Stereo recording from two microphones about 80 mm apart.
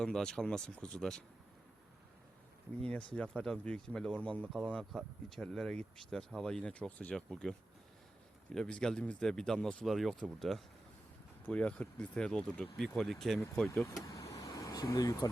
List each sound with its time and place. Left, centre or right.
0.0 s speech: centre
2.9 s speech: centre
8.5 s speech: centre
9.8 s speech: centre
11.4 s speech: centre
14.1 s vehicle: left